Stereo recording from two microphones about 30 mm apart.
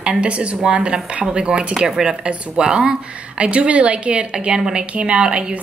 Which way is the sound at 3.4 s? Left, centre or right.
Right.